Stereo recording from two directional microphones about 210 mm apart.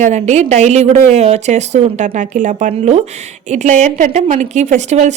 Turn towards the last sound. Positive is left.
turn(degrees=-35)  # may be behind; listen again after turning